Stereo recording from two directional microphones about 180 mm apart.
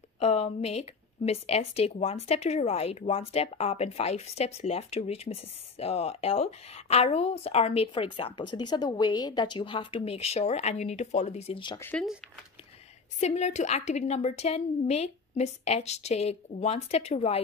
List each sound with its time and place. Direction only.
0.2 s speech: 35° left (ahead or behind)
11.8 s speech: 5° left (ahead or behind)
13.2 s speech: 40° left (ahead or behind)